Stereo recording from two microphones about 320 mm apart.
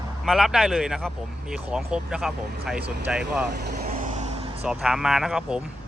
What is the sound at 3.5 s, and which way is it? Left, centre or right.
Vehicle, right.